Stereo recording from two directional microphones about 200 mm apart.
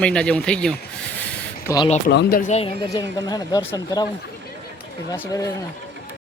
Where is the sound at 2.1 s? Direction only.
55° left (ahead or behind); by 2.7 s 35° left (ahead or behind).